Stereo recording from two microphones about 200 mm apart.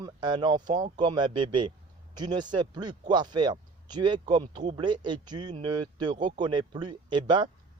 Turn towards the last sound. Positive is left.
turn(degrees=-25)  # may be behind; listen again after turning